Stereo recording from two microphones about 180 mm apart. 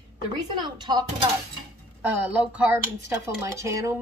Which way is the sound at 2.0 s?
10° right (ahead or behind).